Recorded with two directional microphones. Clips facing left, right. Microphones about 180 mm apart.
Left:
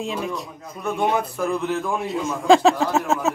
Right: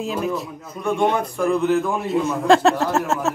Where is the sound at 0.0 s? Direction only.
Centre (ahead or behind).